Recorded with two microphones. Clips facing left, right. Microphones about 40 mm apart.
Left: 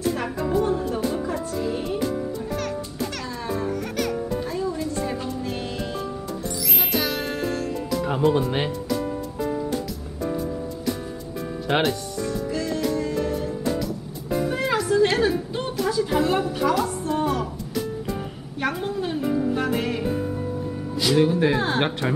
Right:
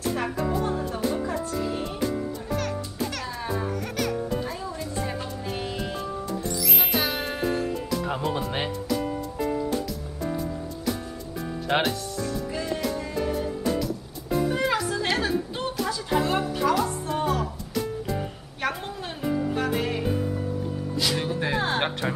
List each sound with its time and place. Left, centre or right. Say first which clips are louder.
0.0 s music: left 2 dB; centre
3.2 s music: left 2 dB; centre
6.8 s music: left 3 dB; centre
8.0 s speech: left 6 dB; centre
11.6 s music: left 2 dB; centre
12.4 s music: left 3 dB; centre
14.3 s music: left 1 dB; centre
15.1 s a sound: left 4 dB; centre
18.6 s music: left 4 dB; centre
21.0 s speech: left 8 dB; centre